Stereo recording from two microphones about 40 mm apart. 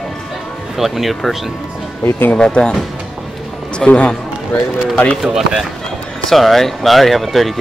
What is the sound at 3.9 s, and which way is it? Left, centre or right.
Speech, left.